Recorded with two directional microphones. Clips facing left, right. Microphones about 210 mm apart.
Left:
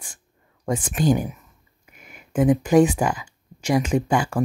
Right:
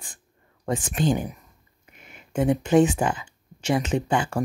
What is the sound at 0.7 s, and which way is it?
Speech, 25° right (ahead or behind).